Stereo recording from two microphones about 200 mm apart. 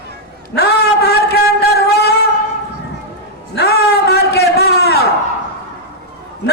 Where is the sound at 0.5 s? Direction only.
55° left (ahead or behind).